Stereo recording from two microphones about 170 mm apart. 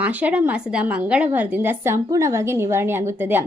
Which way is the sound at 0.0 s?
10° right (ahead or behind).